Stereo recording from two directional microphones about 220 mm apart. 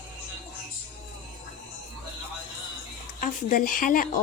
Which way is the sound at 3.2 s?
40° left (ahead or behind).